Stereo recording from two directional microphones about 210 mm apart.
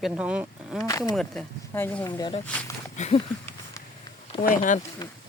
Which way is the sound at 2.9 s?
30° left (ahead or behind).